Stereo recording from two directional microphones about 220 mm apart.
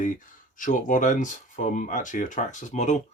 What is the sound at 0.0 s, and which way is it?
Speech, 35° left (ahead or behind).